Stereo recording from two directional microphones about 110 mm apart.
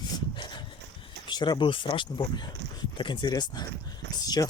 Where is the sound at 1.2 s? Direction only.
40° left (ahead or behind).